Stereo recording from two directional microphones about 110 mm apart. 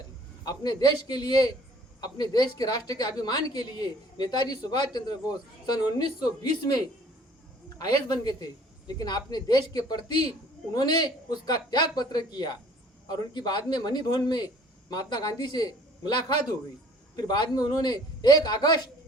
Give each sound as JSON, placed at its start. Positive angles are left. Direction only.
{"t": 0.4, "sound": "speech", "side_deg": 40}
{"t": 7.8, "sound": "speech", "side_deg": 40}